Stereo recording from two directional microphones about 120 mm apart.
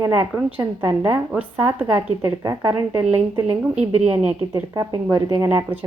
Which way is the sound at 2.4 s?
30° right (ahead or behind).